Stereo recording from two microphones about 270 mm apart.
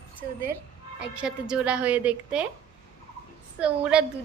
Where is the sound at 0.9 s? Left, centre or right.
Centre.